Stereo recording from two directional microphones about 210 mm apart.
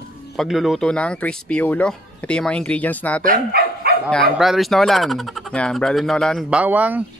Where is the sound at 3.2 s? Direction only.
45° right (ahead or behind).